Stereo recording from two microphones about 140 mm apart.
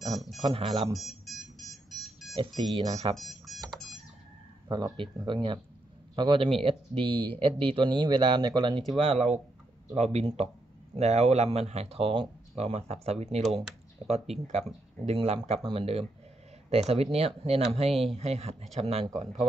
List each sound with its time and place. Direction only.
0.4 s speech: 40° right (ahead or behind)
0.9 s alarm clock: centre (ahead or behind)
2.3 s speech: 35° right (ahead or behind)
3.2 s alarm clock: centre (ahead or behind)
3.7 s a sound: centre (ahead or behind)
4.6 s speech: 30° right (ahead or behind); by 19.0 s 50° right (ahead or behind)